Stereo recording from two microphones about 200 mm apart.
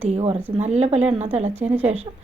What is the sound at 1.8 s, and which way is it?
Speech, 30° right (ahead or behind).